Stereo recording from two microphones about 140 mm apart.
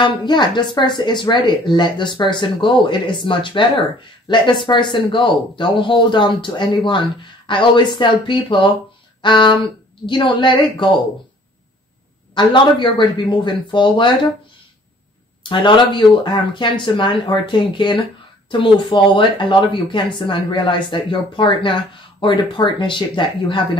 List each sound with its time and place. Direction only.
0.0 s speech: 30° left (ahead or behind)
12.4 s speech: 35° left (ahead or behind)
15.4 s speech: 35° left (ahead or behind)